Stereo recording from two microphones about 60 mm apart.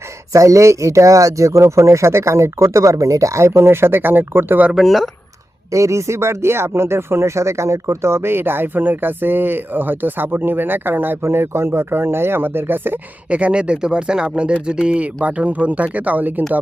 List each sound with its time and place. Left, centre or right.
0.3 s speech: right
4.7 s speech: centre
5.7 s speech: right
11.2 s speech: right
13.3 s speech: centre